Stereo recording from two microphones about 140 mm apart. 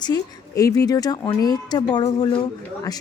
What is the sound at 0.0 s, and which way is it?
Speech, 25° left (ahead or behind).